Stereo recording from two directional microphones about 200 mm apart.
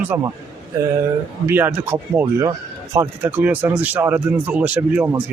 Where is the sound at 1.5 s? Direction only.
10° right (ahead or behind).